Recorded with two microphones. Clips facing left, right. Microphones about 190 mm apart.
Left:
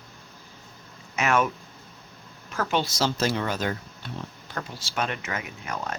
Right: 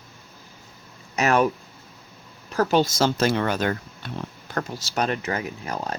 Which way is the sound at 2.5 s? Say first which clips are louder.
Right 6 dB; 40° right (ahead or behind).